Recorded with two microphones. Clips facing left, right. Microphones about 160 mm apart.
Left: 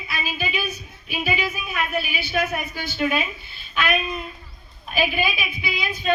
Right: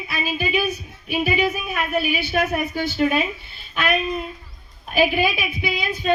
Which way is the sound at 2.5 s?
35° right (ahead or behind).